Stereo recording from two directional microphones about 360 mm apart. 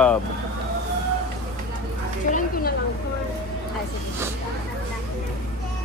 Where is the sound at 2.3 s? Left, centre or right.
Left.